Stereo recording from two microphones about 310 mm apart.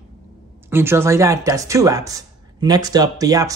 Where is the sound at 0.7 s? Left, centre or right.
Centre.